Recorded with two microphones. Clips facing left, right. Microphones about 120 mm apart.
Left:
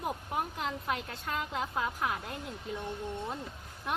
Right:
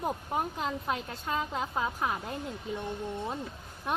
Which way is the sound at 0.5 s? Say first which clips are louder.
Right 2 dB; 10° right (ahead or behind).